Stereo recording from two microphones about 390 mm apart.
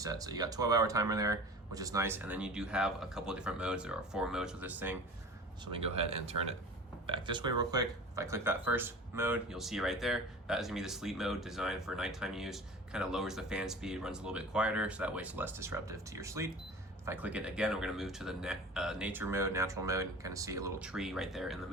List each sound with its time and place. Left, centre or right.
0.0 s speech: centre
5.7 s speech: centre